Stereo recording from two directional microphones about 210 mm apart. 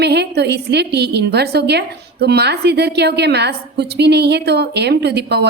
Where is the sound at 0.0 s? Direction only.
50° right (ahead or behind).